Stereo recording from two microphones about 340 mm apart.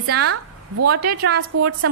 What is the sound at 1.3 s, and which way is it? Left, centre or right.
Speech, right.